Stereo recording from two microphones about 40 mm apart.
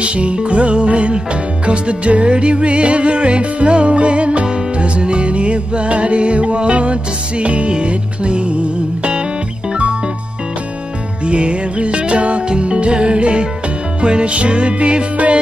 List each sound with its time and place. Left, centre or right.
0.0 s music: right
11.2 s music: right